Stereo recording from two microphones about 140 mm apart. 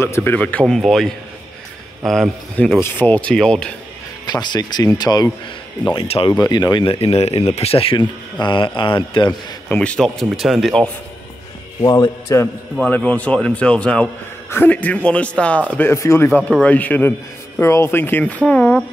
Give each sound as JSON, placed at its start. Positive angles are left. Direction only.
{"t": 0.0, "sound": "speech", "side_deg": 15}
{"t": 4.3, "sound": "speech", "side_deg": 30}
{"t": 5.9, "sound": "speech", "side_deg": 40}
{"t": 6.3, "sound": "speech", "side_deg": 30}
{"t": 9.7, "sound": "speech", "side_deg": 5}
{"t": 11.8, "sound": "speech", "side_deg": 25}
{"t": 12.9, "sound": "speech", "side_deg": 10}
{"t": 16.3, "sound": "speech", "side_deg": 10}